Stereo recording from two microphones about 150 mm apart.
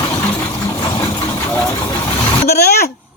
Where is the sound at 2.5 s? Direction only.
90° left.